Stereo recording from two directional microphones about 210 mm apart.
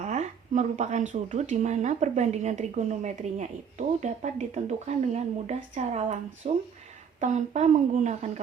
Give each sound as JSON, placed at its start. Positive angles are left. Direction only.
{"t": 0.0, "sound": "speech", "side_deg": -35}